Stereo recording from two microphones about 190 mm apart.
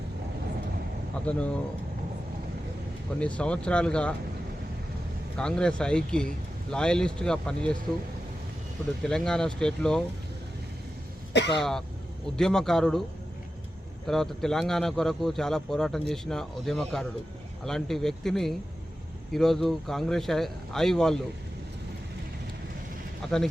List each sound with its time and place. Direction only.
1.3 s speech: 5° left (ahead or behind)
3.2 s speech: 5° left (ahead or behind)
5.4 s speech: 5° left (ahead or behind)
9.0 s speech: 5° left (ahead or behind)
11.3 s speech: 65° left (ahead or behind)
12.4 s speech: 5° left (ahead or behind)
14.1 s speech: centre (ahead or behind)
23.2 s speech: centre (ahead or behind)